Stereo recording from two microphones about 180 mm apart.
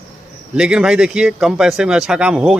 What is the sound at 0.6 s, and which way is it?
A man's voice, 5° right (ahead or behind).